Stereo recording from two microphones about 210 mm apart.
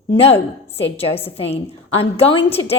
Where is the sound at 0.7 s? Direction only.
30° left (ahead or behind).